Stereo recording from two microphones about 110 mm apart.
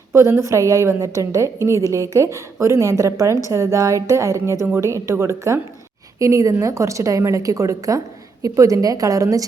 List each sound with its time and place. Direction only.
0.1 s a woman's voice: 25° right (ahead or behind)